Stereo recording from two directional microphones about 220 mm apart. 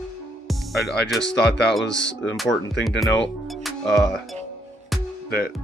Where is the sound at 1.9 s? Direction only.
55° left (ahead or behind).